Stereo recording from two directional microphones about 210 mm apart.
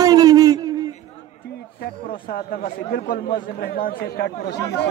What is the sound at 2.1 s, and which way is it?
Speech, 45° left (ahead or behind).